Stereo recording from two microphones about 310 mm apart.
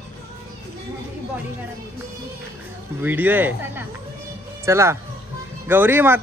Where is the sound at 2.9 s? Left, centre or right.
Centre.